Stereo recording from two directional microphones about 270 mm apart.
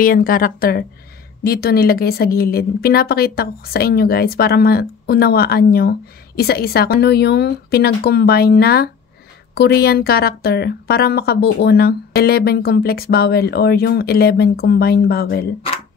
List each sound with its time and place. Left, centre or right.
0.0 s a woman's voice: left